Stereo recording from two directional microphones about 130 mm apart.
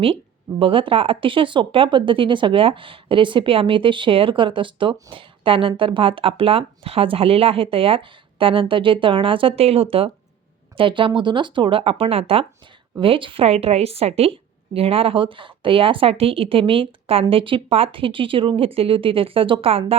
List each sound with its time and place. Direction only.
0.6 s a woman's voice: 40° right (ahead or behind)